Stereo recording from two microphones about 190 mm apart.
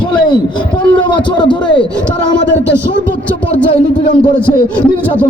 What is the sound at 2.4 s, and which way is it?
Speech, 65° left (ahead or behind).